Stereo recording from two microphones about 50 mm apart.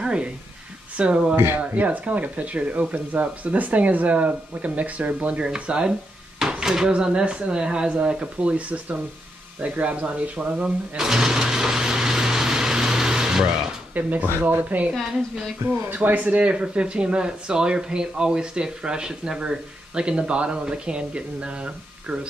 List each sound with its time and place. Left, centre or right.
0.0 s a sound: centre
0.9 s speech: right
1.3 s speech: right
1.6 s speech: right
5.5 s speech: centre
6.5 s a sound: centre
6.9 s speech: centre
11.0 s vehicle: centre
13.9 s speech: right
15.9 s speech: right